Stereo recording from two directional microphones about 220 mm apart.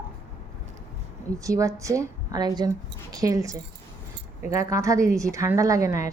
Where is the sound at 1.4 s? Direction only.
15° right (ahead or behind).